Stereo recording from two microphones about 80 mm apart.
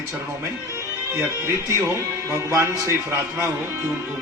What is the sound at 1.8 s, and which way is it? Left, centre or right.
Speech, right.